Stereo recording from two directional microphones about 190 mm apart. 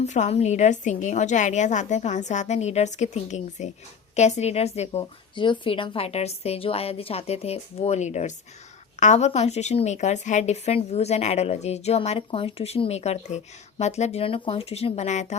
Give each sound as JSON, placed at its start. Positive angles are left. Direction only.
{"t": 0.0, "sound": "a woman's voice", "side_deg": 35}